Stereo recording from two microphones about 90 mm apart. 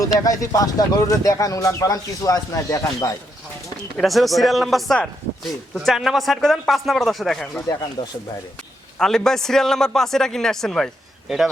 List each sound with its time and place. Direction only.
0.2 s speech: 40° left (ahead or behind)
3.9 s speech: centre (ahead or behind)
9.0 s speech: 5° left (ahead or behind)